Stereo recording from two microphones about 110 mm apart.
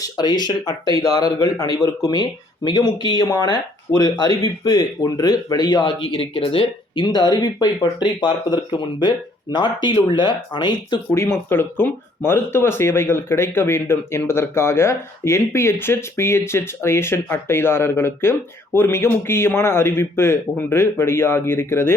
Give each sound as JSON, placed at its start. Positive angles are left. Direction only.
{"t": 0.0, "sound": "speech", "side_deg": 40}
{"t": 11.1, "sound": "speech", "side_deg": 25}